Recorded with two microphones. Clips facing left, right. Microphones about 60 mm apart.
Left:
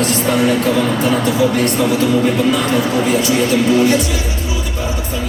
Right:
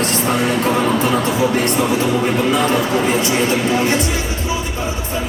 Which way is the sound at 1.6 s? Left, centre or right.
Right.